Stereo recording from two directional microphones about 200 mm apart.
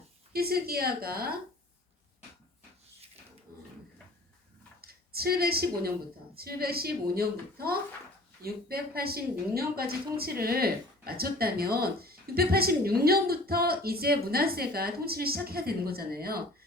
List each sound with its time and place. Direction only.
0.3 s speech: 50° right (ahead or behind)
4.8 s speech: 50° right (ahead or behind)